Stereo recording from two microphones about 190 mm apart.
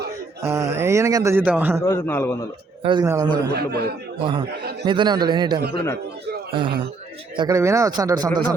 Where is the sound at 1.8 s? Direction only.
10° left (ahead or behind).